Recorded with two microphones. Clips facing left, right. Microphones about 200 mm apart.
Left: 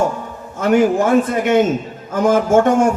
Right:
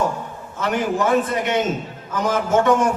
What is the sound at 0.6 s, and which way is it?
A man's voice, 50° left (ahead or behind).